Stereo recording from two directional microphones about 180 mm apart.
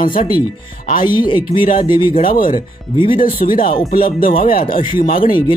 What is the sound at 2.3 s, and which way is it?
Speech, 50° left (ahead or behind).